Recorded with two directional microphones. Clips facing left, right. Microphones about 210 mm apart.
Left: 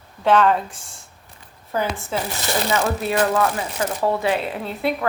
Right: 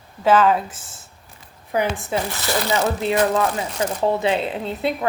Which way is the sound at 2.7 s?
20° right (ahead or behind).